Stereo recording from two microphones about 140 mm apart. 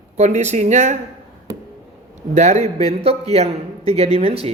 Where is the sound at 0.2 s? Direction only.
55° right (ahead or behind).